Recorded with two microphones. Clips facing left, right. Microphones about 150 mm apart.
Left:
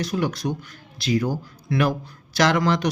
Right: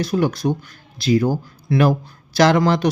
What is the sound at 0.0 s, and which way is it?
Speech, 30° right (ahead or behind).